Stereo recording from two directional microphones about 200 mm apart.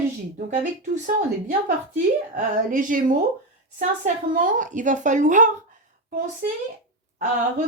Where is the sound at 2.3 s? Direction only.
40° right (ahead or behind).